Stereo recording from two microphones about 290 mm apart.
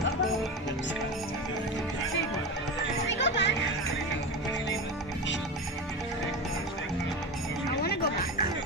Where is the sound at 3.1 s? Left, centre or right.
Left.